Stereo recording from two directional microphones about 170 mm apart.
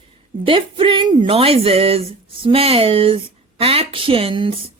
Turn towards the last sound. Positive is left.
turn(degrees=-30)  # may be behind; listen again after turning